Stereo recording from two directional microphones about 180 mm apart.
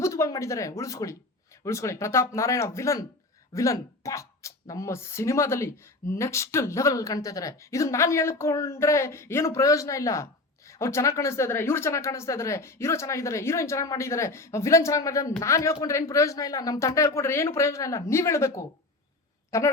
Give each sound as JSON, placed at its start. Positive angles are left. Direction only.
{"t": 0.0, "sound": "speech", "side_deg": 15}